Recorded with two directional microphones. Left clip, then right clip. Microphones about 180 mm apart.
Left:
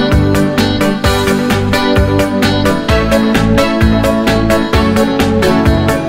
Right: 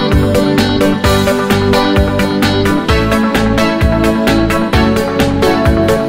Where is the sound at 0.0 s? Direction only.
Centre (ahead or behind).